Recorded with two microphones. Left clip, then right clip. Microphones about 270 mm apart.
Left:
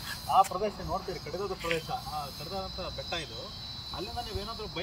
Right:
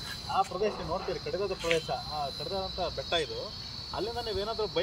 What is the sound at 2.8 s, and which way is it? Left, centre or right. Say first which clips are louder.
Speech: right 6 dB; right.